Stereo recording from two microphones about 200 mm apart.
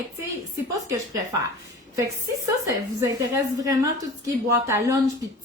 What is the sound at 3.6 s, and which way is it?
A woman's voice, 15° right (ahead or behind).